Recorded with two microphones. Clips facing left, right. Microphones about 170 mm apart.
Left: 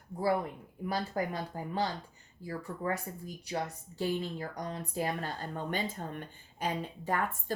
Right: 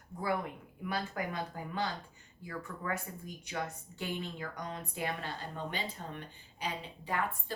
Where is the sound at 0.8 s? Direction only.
35° left (ahead or behind).